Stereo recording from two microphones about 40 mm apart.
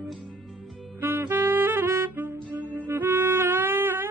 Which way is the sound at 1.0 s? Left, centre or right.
Right.